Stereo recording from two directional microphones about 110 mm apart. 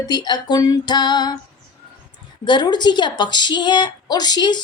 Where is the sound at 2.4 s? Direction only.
40° left (ahead or behind).